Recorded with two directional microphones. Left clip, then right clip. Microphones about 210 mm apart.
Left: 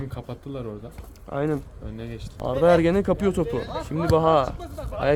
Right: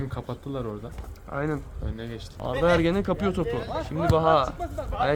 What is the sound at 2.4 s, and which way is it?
Speech, 55° left (ahead or behind).